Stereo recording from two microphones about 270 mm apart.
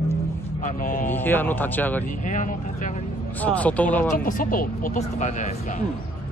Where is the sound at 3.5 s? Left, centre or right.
Centre.